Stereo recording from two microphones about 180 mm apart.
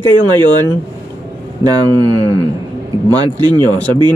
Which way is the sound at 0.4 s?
25° right (ahead or behind).